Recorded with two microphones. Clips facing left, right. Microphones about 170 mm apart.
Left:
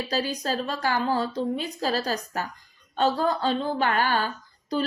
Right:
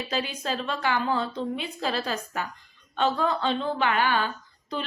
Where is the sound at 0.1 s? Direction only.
40° left (ahead or behind).